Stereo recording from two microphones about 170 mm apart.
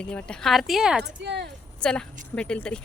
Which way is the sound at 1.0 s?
85° right.